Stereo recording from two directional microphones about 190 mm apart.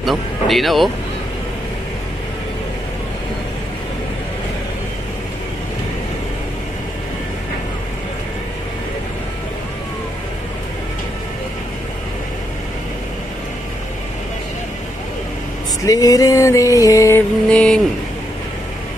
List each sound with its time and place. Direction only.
0.0 s speech: centre (ahead or behind)
15.8 s a sound: 20° left (ahead or behind)
17.5 s speech: 5° left (ahead or behind)